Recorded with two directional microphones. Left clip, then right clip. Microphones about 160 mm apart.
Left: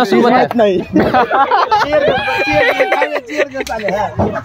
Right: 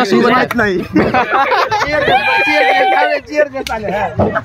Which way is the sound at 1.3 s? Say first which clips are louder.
Left 1 dB; centre (ahead or behind).